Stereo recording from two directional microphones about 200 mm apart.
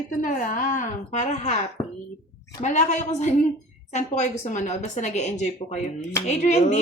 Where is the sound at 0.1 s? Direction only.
40° left (ahead or behind).